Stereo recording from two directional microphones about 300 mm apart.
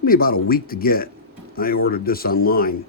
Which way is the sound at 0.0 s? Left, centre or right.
Left.